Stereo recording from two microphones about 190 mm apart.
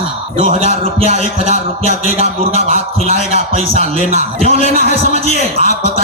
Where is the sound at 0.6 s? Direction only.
40° left (ahead or behind).